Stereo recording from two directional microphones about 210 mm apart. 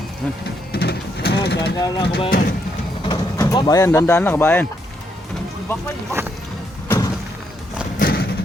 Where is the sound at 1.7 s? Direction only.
20° left (ahead or behind).